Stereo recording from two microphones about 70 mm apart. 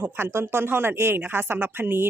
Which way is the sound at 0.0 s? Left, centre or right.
Right.